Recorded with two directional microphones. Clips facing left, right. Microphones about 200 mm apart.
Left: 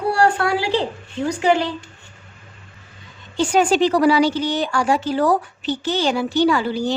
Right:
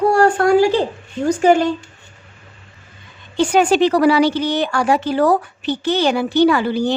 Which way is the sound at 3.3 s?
60° right (ahead or behind).